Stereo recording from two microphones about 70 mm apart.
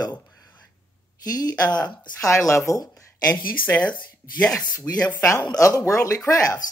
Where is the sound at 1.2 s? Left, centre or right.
Left.